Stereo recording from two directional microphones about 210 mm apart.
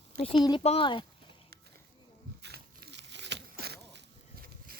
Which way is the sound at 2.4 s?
50° right (ahead or behind).